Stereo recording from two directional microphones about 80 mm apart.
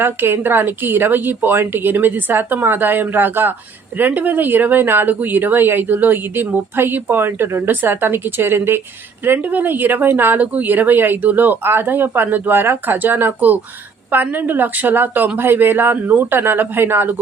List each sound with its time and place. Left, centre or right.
0.0 s speech: right